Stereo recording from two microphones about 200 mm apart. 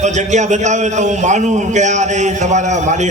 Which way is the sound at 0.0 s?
35° right (ahead or behind).